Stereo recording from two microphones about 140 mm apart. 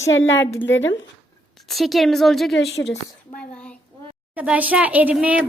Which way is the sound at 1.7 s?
Centre (ahead or behind).